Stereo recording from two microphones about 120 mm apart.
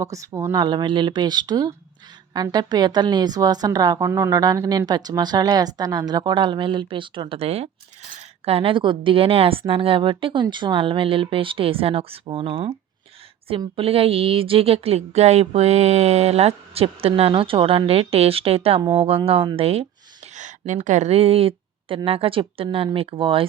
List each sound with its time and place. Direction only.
0.0 s speech: 25° right (ahead or behind)
0.5 s a woman's voice: 40° right (ahead or behind)
13.7 s speech: 50° right (ahead or behind)